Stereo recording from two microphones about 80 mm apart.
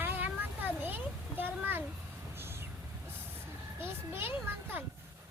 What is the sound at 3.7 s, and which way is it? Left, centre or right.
Children playing, right.